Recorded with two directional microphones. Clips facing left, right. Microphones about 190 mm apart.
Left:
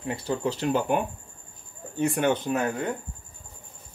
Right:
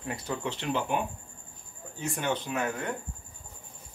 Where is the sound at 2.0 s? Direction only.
60° left (ahead or behind).